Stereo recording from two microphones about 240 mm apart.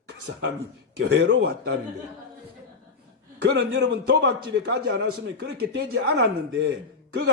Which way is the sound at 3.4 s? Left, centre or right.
Right.